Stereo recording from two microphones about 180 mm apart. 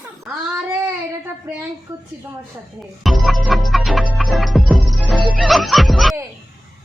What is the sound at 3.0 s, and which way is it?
Music, centre (ahead or behind).